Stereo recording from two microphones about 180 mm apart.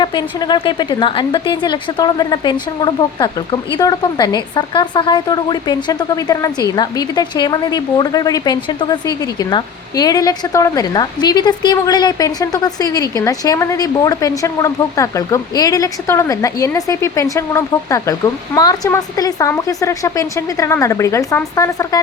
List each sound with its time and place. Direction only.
0.0 s a woman's voice: 25° left (ahead or behind)